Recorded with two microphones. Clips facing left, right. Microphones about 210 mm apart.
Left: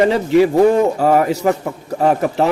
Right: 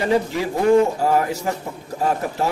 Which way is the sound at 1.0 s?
65° left (ahead or behind).